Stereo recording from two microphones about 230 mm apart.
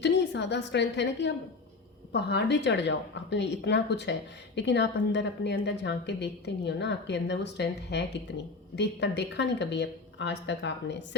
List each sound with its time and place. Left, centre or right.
0.0 s a woman's voice: left